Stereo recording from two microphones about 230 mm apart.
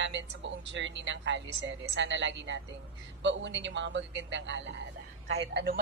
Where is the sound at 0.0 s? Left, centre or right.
Right.